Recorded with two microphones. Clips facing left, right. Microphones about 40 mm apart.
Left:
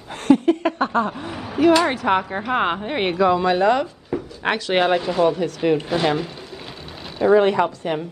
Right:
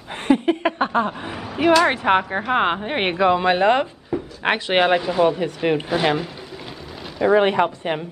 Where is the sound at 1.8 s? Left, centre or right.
Right.